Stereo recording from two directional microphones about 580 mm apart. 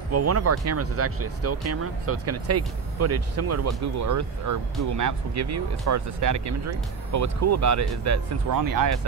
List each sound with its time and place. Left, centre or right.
0.1 s speech: right